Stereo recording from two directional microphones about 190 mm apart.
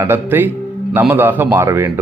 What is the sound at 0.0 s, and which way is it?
Speech, 10° right (ahead or behind).